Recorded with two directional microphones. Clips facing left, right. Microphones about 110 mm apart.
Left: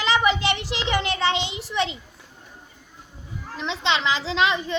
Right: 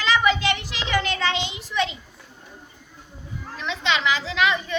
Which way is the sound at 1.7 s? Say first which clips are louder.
Even; 25° left (ahead or behind).